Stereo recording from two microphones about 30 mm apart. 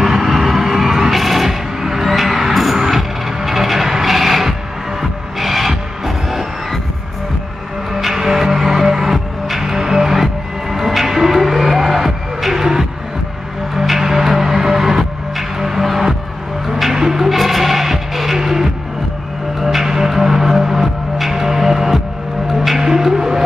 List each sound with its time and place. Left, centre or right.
0.0 s music: centre
7.9 s music: centre
13.9 s music: centre
16.6 s a sound: centre
16.9 s music: centre
17.3 s music: centre